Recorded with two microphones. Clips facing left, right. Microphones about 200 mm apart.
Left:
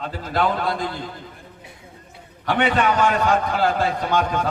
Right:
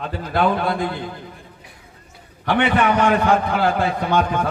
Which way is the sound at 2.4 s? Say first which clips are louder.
Right 2 dB; 60° right (ahead or behind).